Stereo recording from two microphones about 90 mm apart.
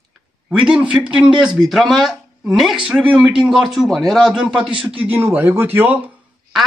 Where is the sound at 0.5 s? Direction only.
10° right (ahead or behind).